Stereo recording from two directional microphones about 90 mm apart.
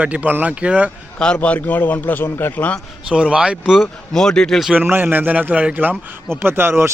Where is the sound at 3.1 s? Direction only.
10° right (ahead or behind).